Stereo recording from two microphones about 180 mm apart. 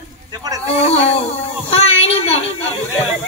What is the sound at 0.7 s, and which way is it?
A child's voice, 35° left (ahead or behind).